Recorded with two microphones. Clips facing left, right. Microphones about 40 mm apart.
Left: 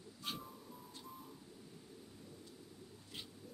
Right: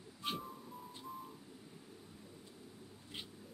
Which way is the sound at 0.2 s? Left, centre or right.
Centre.